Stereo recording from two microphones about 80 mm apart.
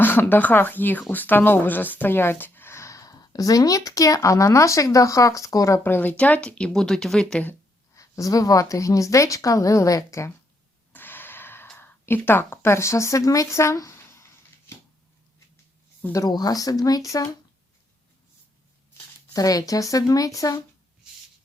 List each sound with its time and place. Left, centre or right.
0.0 s speech: left
5.8 s speech: left; by 7.4 s centre
7.9 s a woman's voice: left
10.9 s gasp: left
11.8 s speech: left
16.1 s a woman's voice: left
19.3 s a woman's voice: left